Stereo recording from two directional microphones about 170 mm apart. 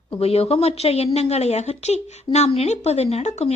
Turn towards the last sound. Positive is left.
turn(degrees=40)  # may be behind; listen again after turning